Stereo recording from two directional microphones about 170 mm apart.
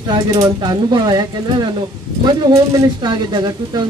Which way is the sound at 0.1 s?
25° right (ahead or behind).